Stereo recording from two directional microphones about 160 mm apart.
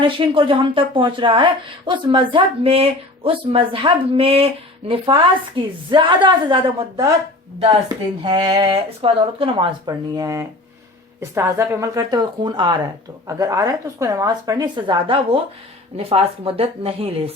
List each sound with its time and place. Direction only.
0.0 s speech: 30° right (ahead or behind)